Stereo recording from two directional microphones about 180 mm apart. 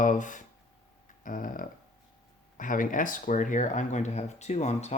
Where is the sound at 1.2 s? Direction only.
50° left (ahead or behind).